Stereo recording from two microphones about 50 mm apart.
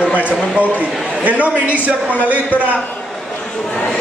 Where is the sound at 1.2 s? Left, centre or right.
Right.